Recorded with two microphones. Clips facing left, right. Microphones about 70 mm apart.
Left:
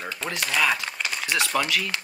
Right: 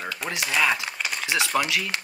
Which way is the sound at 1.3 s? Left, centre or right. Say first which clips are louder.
Even; centre.